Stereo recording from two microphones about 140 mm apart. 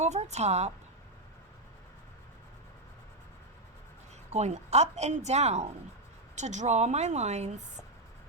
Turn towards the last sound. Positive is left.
turn(degrees=-55)  # may be behind; listen again after turning